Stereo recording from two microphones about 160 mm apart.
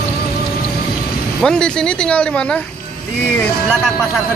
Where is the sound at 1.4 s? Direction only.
5° left (ahead or behind).